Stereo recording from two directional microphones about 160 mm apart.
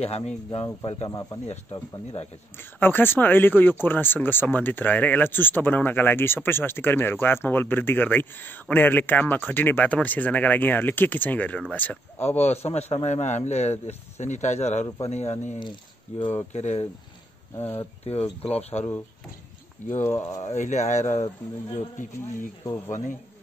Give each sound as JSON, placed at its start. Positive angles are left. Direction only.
{"t": 0.0, "sound": "speech", "side_deg": 40}
{"t": 1.5, "sound": "speech", "side_deg": 40}
{"t": 2.5, "sound": "speech", "side_deg": 15}
{"t": 12.4, "sound": "a man's voice", "side_deg": 40}
{"t": 16.2, "sound": "speech", "side_deg": 30}
{"t": 16.5, "sound": "a man's voice", "side_deg": 45}
{"t": 17.6, "sound": "speech", "side_deg": 15}
{"t": 18.4, "sound": "speech", "side_deg": 40}
{"t": 20.0, "sound": "speech", "side_deg": 15}
{"t": 20.4, "sound": "a man's voice", "side_deg": 50}
{"t": 22.8, "sound": "a man's voice", "side_deg": 45}